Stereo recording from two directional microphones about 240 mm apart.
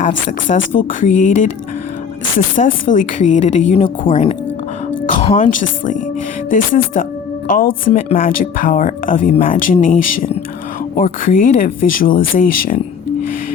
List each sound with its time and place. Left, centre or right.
0.0 s speech: left
2.6 s speech: left